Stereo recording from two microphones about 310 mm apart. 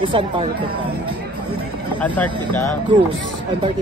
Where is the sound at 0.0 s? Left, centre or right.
Centre.